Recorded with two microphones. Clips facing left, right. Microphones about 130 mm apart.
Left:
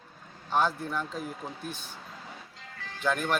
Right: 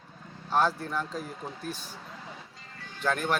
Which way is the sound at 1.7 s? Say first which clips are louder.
Right 3 dB; 35° right (ahead or behind).